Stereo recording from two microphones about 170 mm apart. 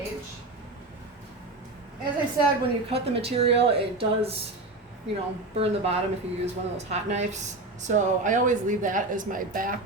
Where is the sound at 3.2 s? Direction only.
35° right (ahead or behind).